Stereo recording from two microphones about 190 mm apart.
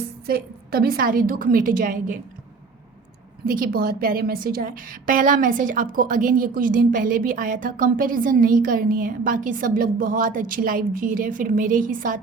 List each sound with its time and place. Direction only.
0.3 s a woman's voice: 55° right (ahead or behind)
3.4 s a woman's voice: 50° right (ahead or behind)